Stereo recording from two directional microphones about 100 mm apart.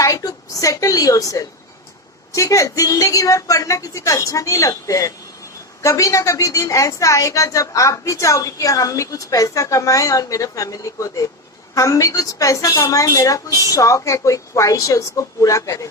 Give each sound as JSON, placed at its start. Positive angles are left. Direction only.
{"t": 0.0, "sound": "a woman's voice", "side_deg": 35}